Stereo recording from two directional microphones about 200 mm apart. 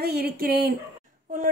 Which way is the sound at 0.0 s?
50° right (ahead or behind).